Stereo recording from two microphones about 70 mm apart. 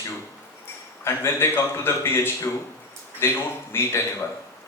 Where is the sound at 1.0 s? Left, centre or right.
Left.